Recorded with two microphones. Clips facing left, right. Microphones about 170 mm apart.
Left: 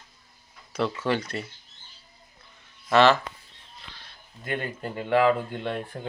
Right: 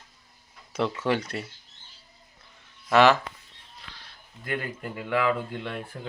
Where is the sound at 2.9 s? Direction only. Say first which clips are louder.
Even; 15° right (ahead or behind).